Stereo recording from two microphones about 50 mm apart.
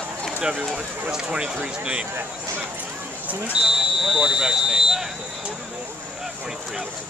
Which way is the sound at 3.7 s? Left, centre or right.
Centre.